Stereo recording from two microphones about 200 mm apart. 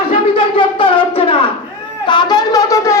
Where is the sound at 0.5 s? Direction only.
25° left (ahead or behind).